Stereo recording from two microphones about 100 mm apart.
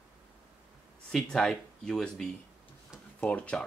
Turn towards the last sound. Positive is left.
turn(degrees=10)  # may be behind; listen again after turning